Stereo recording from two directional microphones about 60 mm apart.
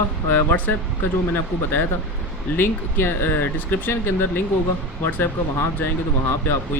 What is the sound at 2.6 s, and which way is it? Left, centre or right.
Speech, left.